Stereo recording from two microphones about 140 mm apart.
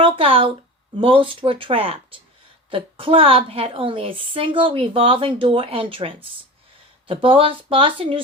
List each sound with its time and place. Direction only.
0.0 s a woman's voice: 40° right (ahead or behind)